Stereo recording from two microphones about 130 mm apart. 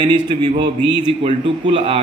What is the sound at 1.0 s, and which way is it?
Speech, 45° right (ahead or behind).